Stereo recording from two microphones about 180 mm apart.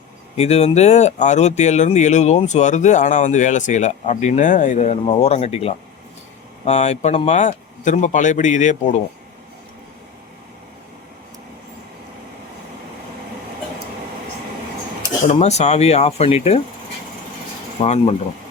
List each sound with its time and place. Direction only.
0.3 s speech: 35° left (ahead or behind)
15.3 s speech: 35° left (ahead or behind)
17.7 s speech: 35° left (ahead or behind)